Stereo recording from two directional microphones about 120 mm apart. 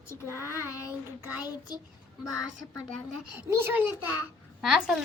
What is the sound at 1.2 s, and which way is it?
Speech, 15° right (ahead or behind).